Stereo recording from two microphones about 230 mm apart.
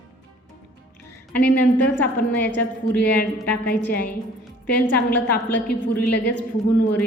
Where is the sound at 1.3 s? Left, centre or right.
Centre.